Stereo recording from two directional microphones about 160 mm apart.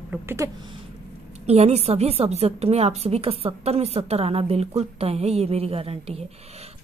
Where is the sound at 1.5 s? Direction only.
40° right (ahead or behind).